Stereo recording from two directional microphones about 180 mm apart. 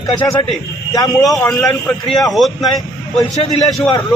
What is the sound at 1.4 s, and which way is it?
Speech, 5° left (ahead or behind).